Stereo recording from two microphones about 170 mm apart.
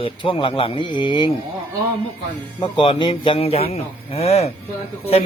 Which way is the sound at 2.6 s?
30° left (ahead or behind).